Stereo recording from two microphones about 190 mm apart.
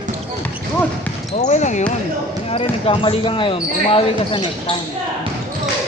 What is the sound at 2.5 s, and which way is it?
Speech, 30° left (ahead or behind).